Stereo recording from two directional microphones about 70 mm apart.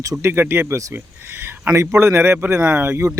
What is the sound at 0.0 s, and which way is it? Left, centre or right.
Speech, right.